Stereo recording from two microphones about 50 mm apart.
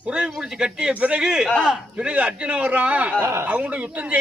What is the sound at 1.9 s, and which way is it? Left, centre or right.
A man's voice, right.